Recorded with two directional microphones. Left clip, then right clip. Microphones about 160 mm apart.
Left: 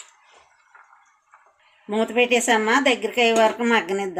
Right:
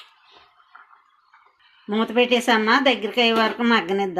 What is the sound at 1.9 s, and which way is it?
A woman's voice, 40° right (ahead or behind).